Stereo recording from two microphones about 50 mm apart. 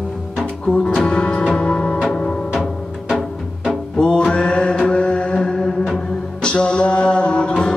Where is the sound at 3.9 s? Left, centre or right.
Centre.